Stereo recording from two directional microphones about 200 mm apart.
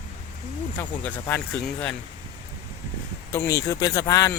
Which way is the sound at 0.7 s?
10° left (ahead or behind).